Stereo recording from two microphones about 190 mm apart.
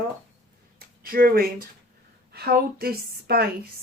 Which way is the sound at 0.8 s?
50° right (ahead or behind).